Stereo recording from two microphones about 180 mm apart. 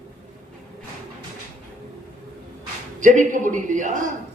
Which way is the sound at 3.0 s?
45° right (ahead or behind).